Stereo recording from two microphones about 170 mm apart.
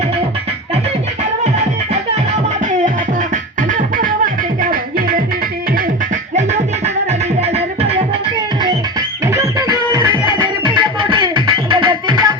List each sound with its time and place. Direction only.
2.6 s music: 50° right (ahead or behind)
6.3 s music: 40° right (ahead or behind)
8.6 s music: 20° right (ahead or behind)
10.4 s music: 30° right (ahead or behind)